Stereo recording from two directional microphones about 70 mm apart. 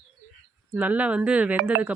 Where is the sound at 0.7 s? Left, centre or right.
Right.